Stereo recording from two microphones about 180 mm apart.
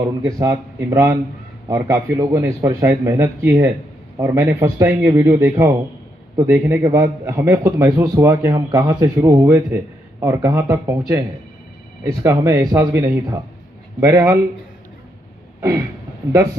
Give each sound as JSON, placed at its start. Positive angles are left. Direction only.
{"t": 0.3, "sound": "a man's voice", "side_deg": -20}